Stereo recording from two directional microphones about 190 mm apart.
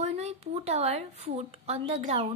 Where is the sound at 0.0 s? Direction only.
35° right (ahead or behind).